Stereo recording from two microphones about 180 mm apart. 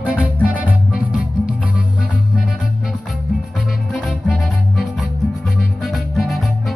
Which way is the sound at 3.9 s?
Centre (ahead or behind).